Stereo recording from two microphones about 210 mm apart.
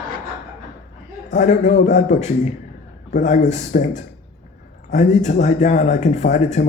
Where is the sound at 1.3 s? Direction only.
35° left (ahead or behind).